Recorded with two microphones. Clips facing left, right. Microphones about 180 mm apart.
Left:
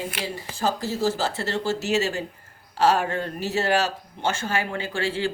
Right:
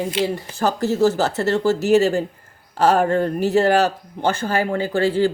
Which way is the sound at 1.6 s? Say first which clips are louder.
Right 9 dB; 45° right (ahead or behind).